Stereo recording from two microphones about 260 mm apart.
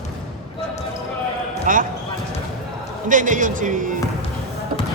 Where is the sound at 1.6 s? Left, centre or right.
Right.